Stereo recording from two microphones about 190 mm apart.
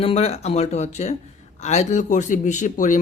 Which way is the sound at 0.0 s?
30° left (ahead or behind).